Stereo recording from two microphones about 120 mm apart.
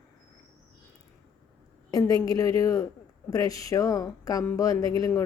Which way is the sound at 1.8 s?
30° left (ahead or behind).